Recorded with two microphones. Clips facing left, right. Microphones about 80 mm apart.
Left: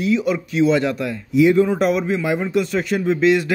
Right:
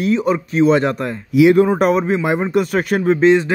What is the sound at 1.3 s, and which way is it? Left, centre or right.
Speech, right.